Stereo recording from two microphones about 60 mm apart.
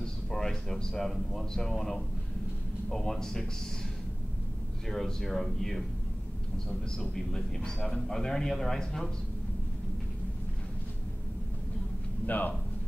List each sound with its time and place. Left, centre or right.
0.0 s a man's voice: centre
4.8 s a man's voice: centre
7.0 s a man's voice: centre
12.3 s speech: left